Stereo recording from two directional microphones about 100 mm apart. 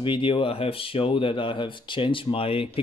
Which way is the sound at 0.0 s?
60° left (ahead or behind).